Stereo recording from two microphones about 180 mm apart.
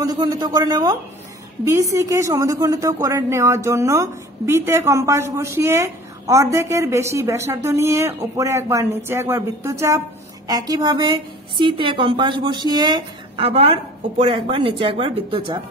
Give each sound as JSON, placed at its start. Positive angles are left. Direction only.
{"t": 0.0, "sound": "a woman's voice", "side_deg": -20}